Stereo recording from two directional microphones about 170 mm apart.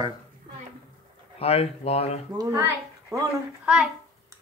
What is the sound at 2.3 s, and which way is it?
Speech, 15° right (ahead or behind).